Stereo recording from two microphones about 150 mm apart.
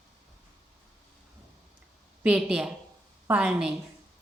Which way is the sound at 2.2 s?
5° right (ahead or behind).